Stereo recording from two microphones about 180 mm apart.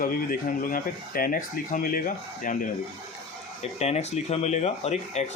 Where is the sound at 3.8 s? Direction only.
35° left (ahead or behind).